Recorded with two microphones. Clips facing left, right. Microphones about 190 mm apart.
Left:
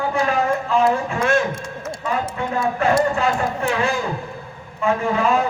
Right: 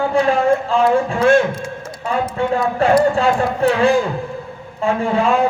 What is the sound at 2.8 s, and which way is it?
Speech, 30° right (ahead or behind).